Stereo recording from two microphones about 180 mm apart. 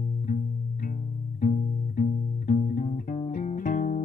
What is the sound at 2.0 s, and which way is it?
Music, 45° left (ahead or behind).